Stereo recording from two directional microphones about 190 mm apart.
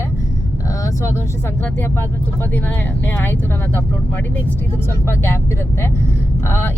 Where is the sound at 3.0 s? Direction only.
10° left (ahead or behind).